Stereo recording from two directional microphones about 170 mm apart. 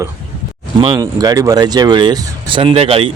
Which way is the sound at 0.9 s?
20° right (ahead or behind).